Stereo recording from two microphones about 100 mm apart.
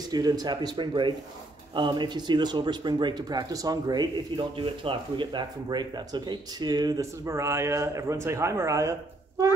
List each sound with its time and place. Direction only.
0.1 s speech: 40° right (ahead or behind)
4.6 s speech: 60° right (ahead or behind); by 7.1 s 40° right (ahead or behind)
7.2 s a man's voice: 25° right (ahead or behind)